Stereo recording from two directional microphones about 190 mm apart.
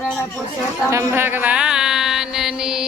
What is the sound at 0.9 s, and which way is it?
Mantra, 15° right (ahead or behind).